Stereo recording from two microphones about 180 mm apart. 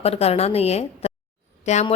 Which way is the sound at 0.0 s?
35° left (ahead or behind).